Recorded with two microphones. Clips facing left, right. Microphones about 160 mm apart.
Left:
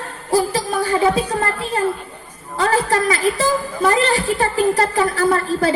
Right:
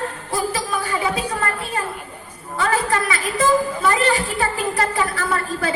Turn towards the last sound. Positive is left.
turn(degrees=35)  # may be behind; listen again after turning